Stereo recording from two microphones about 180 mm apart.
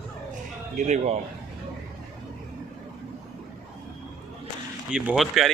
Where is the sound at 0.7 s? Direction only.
40° right (ahead or behind).